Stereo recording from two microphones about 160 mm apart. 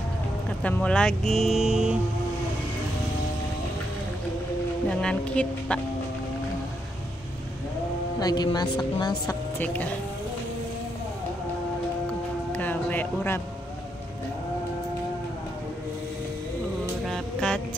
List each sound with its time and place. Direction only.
0.6 s speech: 10° left (ahead or behind)
4.8 s speech: 5° left (ahead or behind)
8.2 s speech: 25° left (ahead or behind)
9.6 s speech: 10° left (ahead or behind)
12.5 s speech: 10° left (ahead or behind)
17.0 s music: 5° left (ahead or behind)